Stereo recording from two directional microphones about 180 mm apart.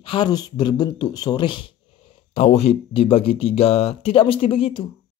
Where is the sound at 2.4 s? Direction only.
35° left (ahead or behind).